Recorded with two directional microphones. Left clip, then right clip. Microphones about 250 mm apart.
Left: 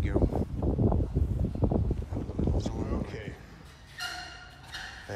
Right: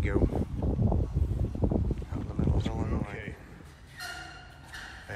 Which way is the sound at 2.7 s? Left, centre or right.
Centre.